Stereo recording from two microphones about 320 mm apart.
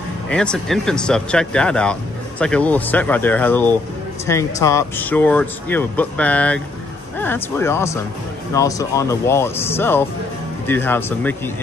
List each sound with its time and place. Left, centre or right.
0.3 s speech: centre